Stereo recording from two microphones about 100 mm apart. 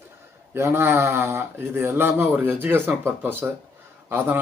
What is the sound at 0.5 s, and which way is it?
Speech, 25° right (ahead or behind).